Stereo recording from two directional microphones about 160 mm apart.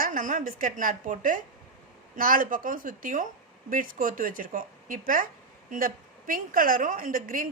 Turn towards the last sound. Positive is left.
turn(degrees=-60)  # may be behind; listen again after turning